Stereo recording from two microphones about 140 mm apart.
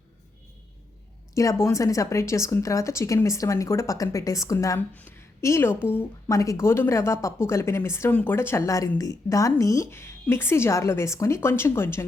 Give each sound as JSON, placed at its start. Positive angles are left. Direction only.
{"t": 1.4, "sound": "a woman's voice", "side_deg": 20}